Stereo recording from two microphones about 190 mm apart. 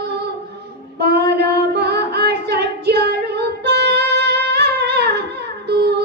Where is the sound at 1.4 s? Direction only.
60° right (ahead or behind).